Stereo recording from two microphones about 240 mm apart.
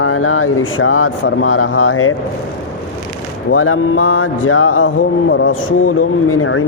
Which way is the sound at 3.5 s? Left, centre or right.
Left.